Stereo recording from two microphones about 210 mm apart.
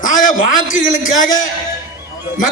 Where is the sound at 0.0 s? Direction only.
40° left (ahead or behind).